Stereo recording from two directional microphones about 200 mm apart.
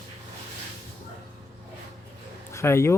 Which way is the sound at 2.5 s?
15° left (ahead or behind).